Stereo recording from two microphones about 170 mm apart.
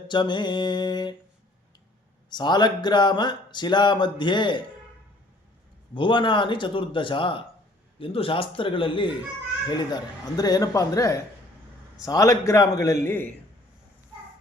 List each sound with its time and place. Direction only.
0.1 s speech: 25° left (ahead or behind)
2.3 s speech: 25° left (ahead or behind)
5.9 s a man's voice: 30° left (ahead or behind); by 13.3 s 10° left (ahead or behind)